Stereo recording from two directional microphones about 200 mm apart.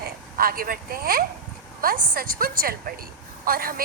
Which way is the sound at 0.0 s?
45° right (ahead or behind).